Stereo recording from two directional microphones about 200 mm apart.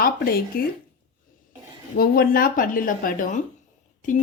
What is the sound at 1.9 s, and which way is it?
Speech, 50° left (ahead or behind).